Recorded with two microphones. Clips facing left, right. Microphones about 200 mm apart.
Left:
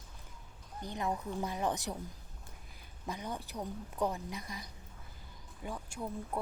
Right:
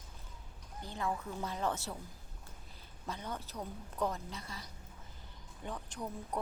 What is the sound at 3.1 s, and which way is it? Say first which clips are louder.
A woman's voice: left 2 dB; 10° left (ahead or behind).